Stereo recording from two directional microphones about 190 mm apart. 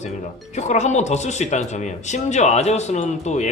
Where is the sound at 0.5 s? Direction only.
35° left (ahead or behind).